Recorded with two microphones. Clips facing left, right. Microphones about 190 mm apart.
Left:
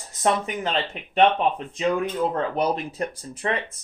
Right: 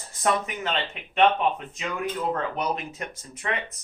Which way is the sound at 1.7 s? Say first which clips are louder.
Left 7 dB; 30° left (ahead or behind).